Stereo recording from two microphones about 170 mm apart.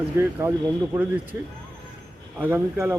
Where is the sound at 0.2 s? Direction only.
15° right (ahead or behind).